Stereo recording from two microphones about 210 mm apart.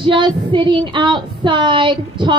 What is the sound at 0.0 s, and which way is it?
Speech, 25° right (ahead or behind).